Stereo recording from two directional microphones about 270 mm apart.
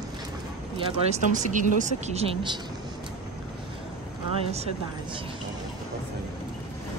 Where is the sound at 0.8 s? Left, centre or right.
Right.